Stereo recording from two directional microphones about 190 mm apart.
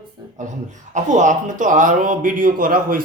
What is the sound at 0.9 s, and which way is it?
Speech, 40° right (ahead or behind).